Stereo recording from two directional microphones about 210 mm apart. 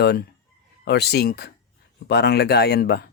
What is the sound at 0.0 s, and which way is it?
Speech, 50° left (ahead or behind).